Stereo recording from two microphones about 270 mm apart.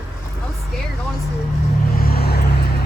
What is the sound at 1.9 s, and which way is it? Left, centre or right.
Vehicle, left.